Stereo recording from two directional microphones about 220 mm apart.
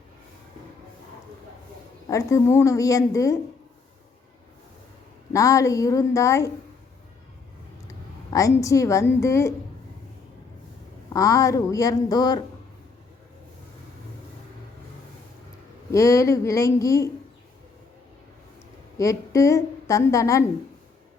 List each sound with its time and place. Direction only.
2.0 s a woman's voice: 15° left (ahead or behind)
5.3 s a woman's voice: 15° left (ahead or behind)
7.9 s a woman's voice: 15° left (ahead or behind)
11.1 s a woman's voice: 15° left (ahead or behind)
15.9 s a woman's voice: 15° left (ahead or behind)
18.9 s a woman's voice: 15° left (ahead or behind)